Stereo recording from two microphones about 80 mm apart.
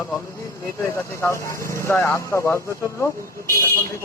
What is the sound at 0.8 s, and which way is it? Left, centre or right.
Speech, left.